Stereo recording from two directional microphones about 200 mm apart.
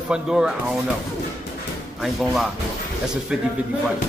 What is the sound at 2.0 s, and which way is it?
A man's voice, centre (ahead or behind).